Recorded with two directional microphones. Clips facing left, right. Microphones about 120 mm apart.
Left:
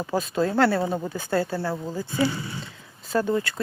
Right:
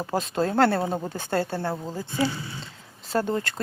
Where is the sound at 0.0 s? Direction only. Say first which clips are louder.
Left 1 dB; 35° right (ahead or behind).